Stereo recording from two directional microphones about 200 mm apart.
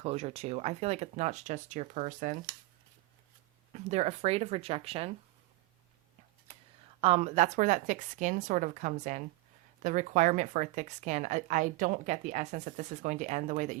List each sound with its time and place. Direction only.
0.0 s a woman's voice: 30° right (ahead or behind)
3.7 s a woman's voice: 35° right (ahead or behind)
7.0 s a woman's voice: 30° right (ahead or behind)